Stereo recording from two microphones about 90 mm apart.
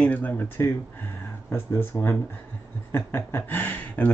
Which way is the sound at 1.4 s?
25° left (ahead or behind).